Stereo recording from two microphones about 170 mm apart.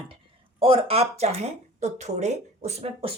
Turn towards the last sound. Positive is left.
turn(degrees=-35)  # may be behind; listen again after turning